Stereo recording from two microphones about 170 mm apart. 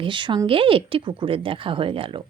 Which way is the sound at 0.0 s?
30° right (ahead or behind).